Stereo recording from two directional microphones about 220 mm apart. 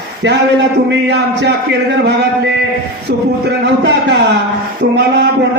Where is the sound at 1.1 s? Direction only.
50° right (ahead or behind).